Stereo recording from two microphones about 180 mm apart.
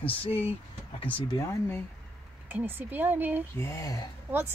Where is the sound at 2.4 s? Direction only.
10° right (ahead or behind).